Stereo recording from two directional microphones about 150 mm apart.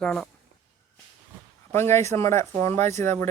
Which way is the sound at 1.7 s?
15° left (ahead or behind).